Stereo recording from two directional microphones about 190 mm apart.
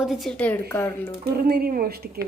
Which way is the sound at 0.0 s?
Centre (ahead or behind).